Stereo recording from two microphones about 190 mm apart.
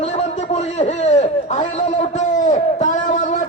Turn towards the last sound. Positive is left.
turn(degrees=40)  # may be behind; listen again after turning